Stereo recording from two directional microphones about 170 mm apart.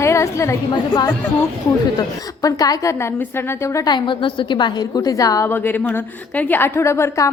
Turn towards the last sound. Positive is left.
turn(degrees=15)  # may be behind; listen again after turning